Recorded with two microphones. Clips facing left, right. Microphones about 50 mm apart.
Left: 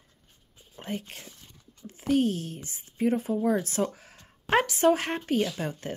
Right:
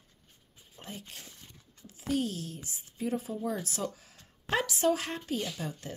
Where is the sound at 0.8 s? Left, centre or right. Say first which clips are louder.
Left 9 dB; left.